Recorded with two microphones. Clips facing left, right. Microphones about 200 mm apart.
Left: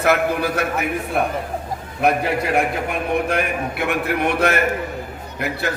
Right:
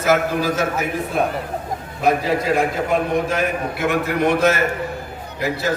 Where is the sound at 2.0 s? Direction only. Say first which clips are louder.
Right 1 dB; 65° left (ahead or behind).